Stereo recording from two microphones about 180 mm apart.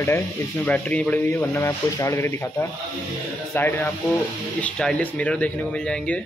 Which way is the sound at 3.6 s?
10° left (ahead or behind).